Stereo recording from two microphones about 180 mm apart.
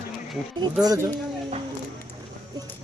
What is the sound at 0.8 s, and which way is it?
Speech, 20° right (ahead or behind).